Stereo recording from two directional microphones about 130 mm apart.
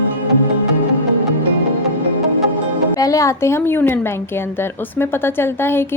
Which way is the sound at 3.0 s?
25° left (ahead or behind).